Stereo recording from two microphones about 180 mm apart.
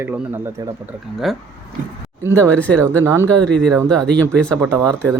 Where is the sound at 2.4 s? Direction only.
10° left (ahead or behind).